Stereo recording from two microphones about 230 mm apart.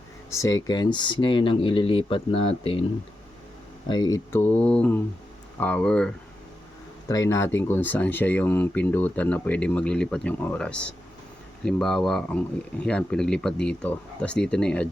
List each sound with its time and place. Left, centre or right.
0.3 s speech: centre
3.8 s speech: centre
7.1 s speech: centre